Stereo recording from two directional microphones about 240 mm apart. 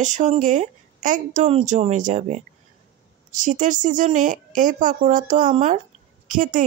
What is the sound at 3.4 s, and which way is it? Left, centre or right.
Speech, right.